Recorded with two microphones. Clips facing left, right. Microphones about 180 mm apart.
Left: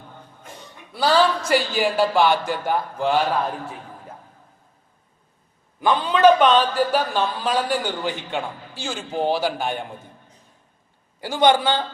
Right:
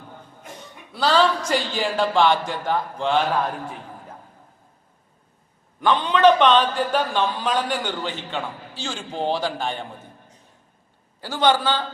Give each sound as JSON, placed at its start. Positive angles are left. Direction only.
{"t": 0.9, "sound": "a man's voice", "side_deg": 10}
{"t": 5.8, "sound": "a man's voice", "side_deg": 10}
{"t": 11.2, "sound": "a man's voice", "side_deg": 15}